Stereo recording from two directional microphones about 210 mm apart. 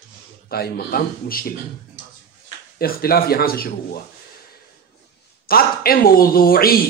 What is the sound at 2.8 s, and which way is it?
A man's voice, 45° left (ahead or behind).